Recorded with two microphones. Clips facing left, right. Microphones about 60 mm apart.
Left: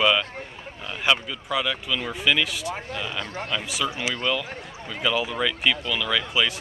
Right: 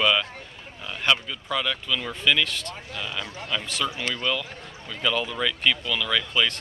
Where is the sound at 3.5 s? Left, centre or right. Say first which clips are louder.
Right 1 dB; centre.